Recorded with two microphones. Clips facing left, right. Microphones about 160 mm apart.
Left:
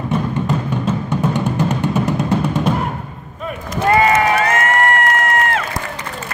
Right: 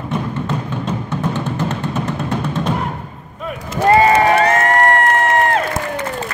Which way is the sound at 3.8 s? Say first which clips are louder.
Right 2 dB; 30° right (ahead or behind).